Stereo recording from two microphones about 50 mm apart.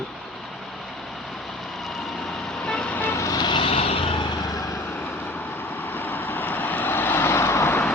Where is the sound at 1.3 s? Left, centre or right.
Centre.